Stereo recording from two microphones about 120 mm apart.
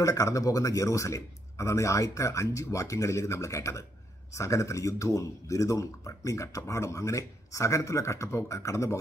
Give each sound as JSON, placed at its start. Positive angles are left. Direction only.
{"t": 0.0, "sound": "speech", "side_deg": 25}